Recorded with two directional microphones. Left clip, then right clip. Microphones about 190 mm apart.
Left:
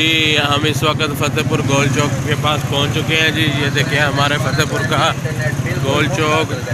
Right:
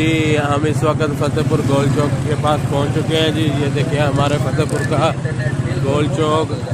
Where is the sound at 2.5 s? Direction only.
25° right (ahead or behind).